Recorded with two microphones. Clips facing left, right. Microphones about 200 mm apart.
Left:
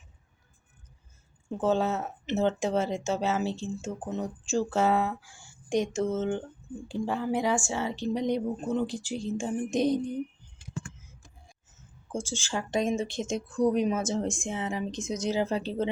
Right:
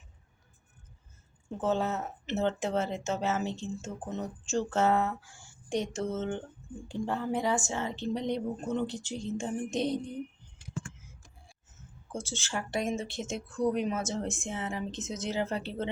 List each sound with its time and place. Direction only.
1.5 s speech: 15° left (ahead or behind)
12.4 s speech: 15° left (ahead or behind)